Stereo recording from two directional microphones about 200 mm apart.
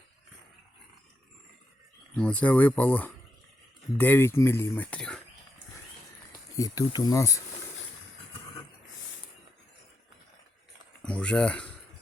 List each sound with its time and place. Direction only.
2.1 s speech: 5° left (ahead or behind)
6.6 s speech: 20° left (ahead or behind)
11.0 s speech: 5° left (ahead or behind)